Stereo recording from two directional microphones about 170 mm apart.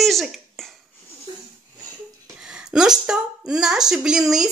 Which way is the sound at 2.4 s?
5° right (ahead or behind).